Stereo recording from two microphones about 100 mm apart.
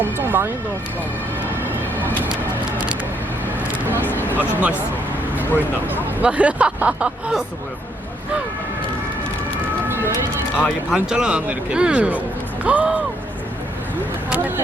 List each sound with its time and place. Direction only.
0.0 s speech: 20° right (ahead or behind)
3.8 s speech: 20° left (ahead or behind)
4.4 s speech: 20° right (ahead or behind)
10.9 s speech: 5° right (ahead or behind)
14.3 s speech: 15° right (ahead or behind)